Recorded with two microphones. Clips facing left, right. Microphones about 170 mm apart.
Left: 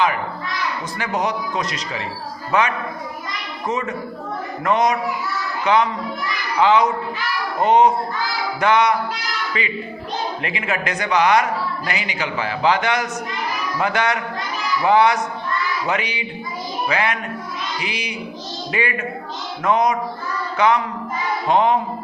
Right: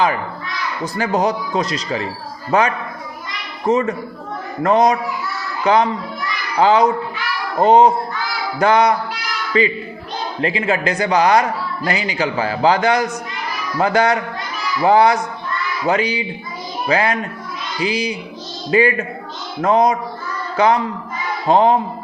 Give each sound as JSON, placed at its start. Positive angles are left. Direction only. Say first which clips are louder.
{"t": 0.9, "sound": "a man's voice", "louder": "right 6 dB", "side_deg": -30}